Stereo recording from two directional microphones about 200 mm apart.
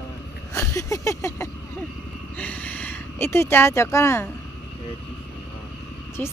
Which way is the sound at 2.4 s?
10° left (ahead or behind).